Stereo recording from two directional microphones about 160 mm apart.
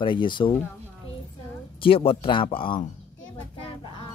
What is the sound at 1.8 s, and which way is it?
Speech, 35° left (ahead or behind).